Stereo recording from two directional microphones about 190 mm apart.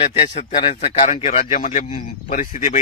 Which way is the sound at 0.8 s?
45° left (ahead or behind).